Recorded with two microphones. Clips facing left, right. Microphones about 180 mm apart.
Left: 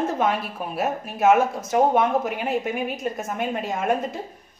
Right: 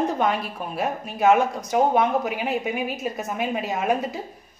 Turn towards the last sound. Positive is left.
turn(degrees=0)  # may be behind; listen again after turning